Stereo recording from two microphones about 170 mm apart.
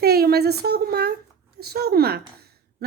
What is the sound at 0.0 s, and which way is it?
A woman's voice, 65° right (ahead or behind).